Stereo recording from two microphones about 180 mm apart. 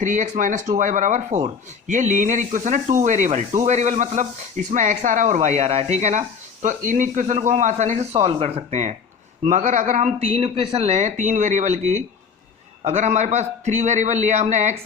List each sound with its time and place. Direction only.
0.0 s speech: 45° right (ahead or behind)